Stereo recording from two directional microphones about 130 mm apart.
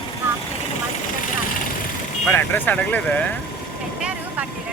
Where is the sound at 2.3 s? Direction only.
15° left (ahead or behind).